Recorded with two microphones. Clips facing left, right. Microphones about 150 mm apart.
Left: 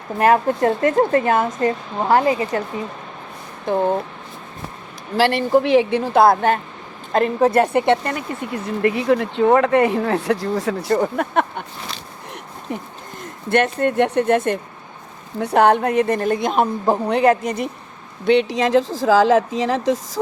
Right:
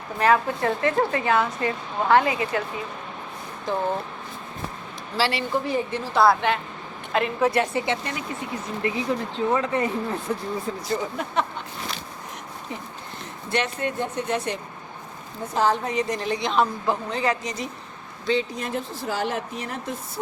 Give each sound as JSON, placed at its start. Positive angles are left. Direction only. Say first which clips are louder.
{"t": 0.2, "sound": "a woman's voice", "louder": "left 5 dB", "side_deg": 45}
{"t": 3.7, "sound": "speech", "louder": "left 7 dB", "side_deg": 55}
{"t": 5.1, "sound": "a woman's voice", "louder": "left 7 dB", "side_deg": 55}
{"t": 5.6, "sound": "speech", "louder": "left 10 dB", "side_deg": 90}
{"t": 6.0, "sound": "a woman's voice", "louder": "left 5 dB", "side_deg": 50}
{"t": 7.6, "sound": "speech", "louder": "left 9 dB", "side_deg": 60}
{"t": 8.8, "sound": "speech", "louder": "left 9 dB", "side_deg": 65}
{"t": 13.5, "sound": "a woman's voice", "louder": "left 8 dB", "side_deg": 55}
{"t": 13.9, "sound": "speech", "louder": "left 10 dB", "side_deg": 75}
{"t": 15.4, "sound": "speech", "louder": "left 8 dB", "side_deg": 70}
{"t": 17.1, "sound": "speech", "louder": "left 10 dB", "side_deg": 60}
{"t": 18.3, "sound": "speech", "louder": "left 9 dB", "side_deg": 80}